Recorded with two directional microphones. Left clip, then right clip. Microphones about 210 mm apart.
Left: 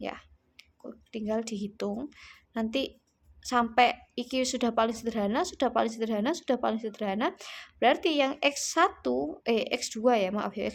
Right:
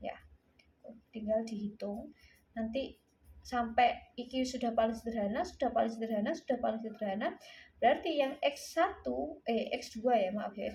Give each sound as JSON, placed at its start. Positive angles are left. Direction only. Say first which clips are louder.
{"t": 0.0, "sound": "clicking", "louder": "left 5 dB", "side_deg": 40}
{"t": 1.1, "sound": "a woman's voice", "louder": "left 2 dB", "side_deg": 35}